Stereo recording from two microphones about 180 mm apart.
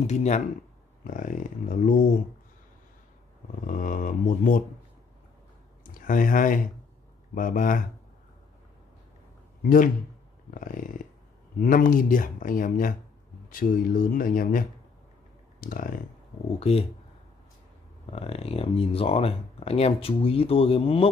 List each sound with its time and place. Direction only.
0.0 s speech: 40° left (ahead or behind)
3.6 s speech: 45° left (ahead or behind)
5.9 s speech: 50° left (ahead or behind)
9.6 s speech: 50° left (ahead or behind)
15.6 s speech: 50° left (ahead or behind)
16.5 s speech: 35° left (ahead or behind)
18.1 s speech: 35° left (ahead or behind)